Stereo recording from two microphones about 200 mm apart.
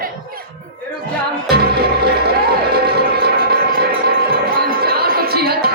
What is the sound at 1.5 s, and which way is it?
Music, 50° right (ahead or behind).